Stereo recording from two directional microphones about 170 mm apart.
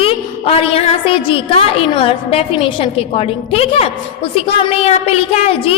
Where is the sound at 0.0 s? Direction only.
35° left (ahead or behind).